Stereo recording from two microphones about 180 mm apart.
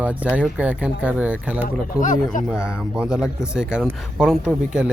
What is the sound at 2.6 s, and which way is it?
Speech, 5° right (ahead or behind).